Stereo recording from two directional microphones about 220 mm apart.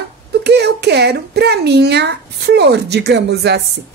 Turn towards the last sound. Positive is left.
turn(degrees=-50)  # may be behind; listen again after turning